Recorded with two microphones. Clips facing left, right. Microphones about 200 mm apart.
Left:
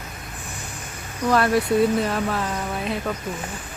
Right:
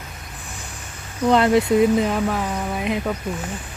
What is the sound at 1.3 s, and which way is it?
Speech, 20° right (ahead or behind).